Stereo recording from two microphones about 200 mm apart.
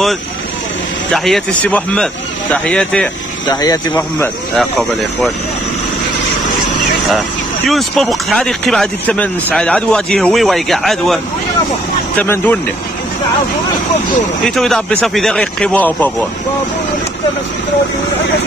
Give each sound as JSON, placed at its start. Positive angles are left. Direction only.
{"t": 1.1, "sound": "speech", "side_deg": 0}
{"t": 3.4, "sound": "speech", "side_deg": 20}
{"t": 3.9, "sound": "speech", "side_deg": 5}
{"t": 7.6, "sound": "speech", "side_deg": 0}
{"t": 12.2, "sound": "speech", "side_deg": 10}
{"t": 14.4, "sound": "speech", "side_deg": 0}